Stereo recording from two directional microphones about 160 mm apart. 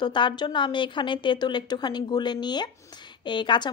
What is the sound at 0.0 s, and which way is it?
A woman's voice, 30° left (ahead or behind).